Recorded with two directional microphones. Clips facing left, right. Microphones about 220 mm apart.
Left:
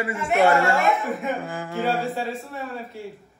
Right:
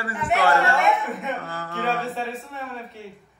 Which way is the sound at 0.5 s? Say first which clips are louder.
Left 1 dB; centre (ahead or behind).